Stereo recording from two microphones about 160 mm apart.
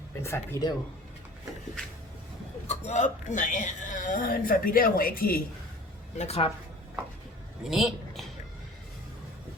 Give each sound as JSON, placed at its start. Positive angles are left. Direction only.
{"t": 0.2, "sound": "speech", "side_deg": 15}
{"t": 2.6, "sound": "speech", "side_deg": 45}
{"t": 6.1, "sound": "speech", "side_deg": 40}
{"t": 7.6, "sound": "a sound", "side_deg": 0}